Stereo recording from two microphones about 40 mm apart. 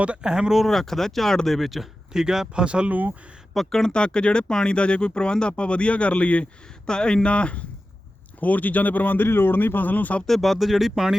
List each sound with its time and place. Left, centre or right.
0.2 s speech: centre
0.7 s speech: centre
2.1 s speech: centre
2.6 s speech: right
3.7 s speech: centre
3.9 s speech: left
6.8 s speech: left
8.4 s speech: left
10.2 s speech: centre